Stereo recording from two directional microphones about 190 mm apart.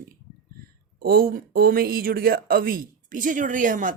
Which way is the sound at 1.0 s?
50° right (ahead or behind).